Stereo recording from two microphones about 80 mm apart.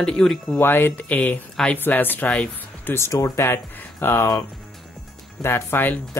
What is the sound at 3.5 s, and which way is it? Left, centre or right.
Speech, left.